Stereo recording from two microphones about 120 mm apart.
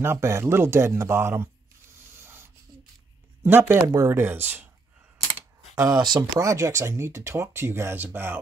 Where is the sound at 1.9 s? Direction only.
20° right (ahead or behind).